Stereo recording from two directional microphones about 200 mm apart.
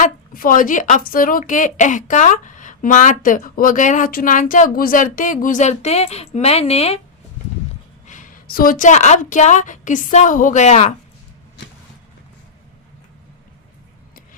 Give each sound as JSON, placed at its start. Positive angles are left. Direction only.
{"t": 0.0, "sound": "a woman's voice", "side_deg": 45}
{"t": 8.0, "sound": "a woman's voice", "side_deg": 40}